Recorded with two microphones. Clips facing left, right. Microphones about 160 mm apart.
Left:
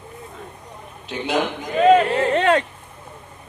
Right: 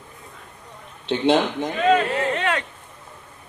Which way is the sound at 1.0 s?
30° right (ahead or behind).